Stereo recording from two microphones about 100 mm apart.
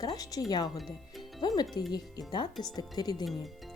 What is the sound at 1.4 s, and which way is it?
Music, 45° left (ahead or behind).